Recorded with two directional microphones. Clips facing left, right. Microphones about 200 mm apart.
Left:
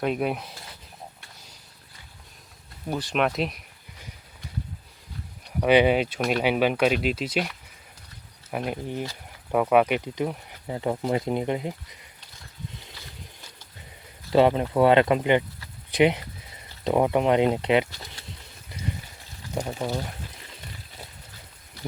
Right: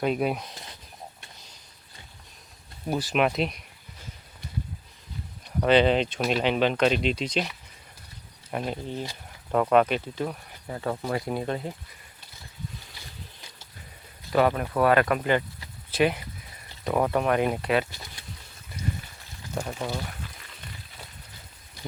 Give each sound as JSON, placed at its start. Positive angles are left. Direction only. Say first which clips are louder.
{"t": 0.0, "sound": "speech", "louder": "even", "side_deg": 0}
{"t": 2.9, "sound": "speech", "louder": "right 1 dB", "side_deg": -5}
{"t": 5.5, "sound": "speech", "louder": "left 1 dB", "side_deg": 10}
{"t": 14.3, "sound": "speech", "louder": "left 4 dB", "side_deg": 25}
{"t": 19.5, "sound": "speech", "louder": "left 3 dB", "side_deg": 15}